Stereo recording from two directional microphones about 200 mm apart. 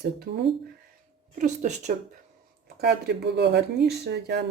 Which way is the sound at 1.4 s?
35° right (ahead or behind).